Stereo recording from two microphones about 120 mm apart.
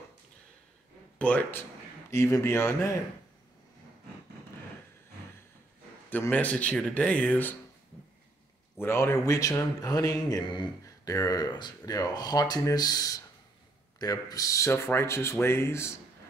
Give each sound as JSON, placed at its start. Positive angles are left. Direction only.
{"t": 1.1, "sound": "speech", "side_deg": 10}
{"t": 2.0, "sound": "a man's voice", "side_deg": 25}
{"t": 6.0, "sound": "speech", "side_deg": 15}
{"t": 8.7, "sound": "a man's voice", "side_deg": 20}